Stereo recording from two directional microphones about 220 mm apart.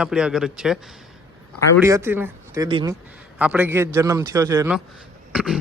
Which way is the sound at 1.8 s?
10° right (ahead or behind).